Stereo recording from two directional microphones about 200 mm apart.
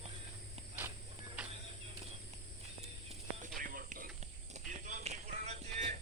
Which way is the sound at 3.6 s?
45° right (ahead or behind).